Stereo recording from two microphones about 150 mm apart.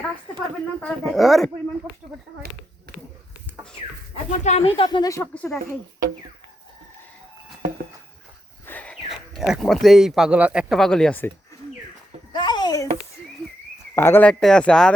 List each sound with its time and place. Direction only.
0.3 s speech: 5° left (ahead or behind)
4.3 s speech: 45° left (ahead or behind)
4.8 s speech: 30° left (ahead or behind)
5.3 s speech: 10° left (ahead or behind)
8.6 s a sound: 10° left (ahead or behind)
9.3 s speech: centre (ahead or behind)
12.3 s a sound: 30° left (ahead or behind)
13.9 s speech: 15° left (ahead or behind)